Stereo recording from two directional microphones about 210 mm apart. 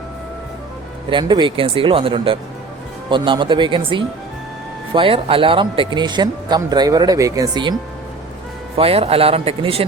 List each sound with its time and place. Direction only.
1.1 s speech: 20° right (ahead or behind)